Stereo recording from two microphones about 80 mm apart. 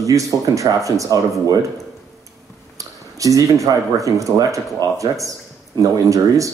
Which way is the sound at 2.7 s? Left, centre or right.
Right.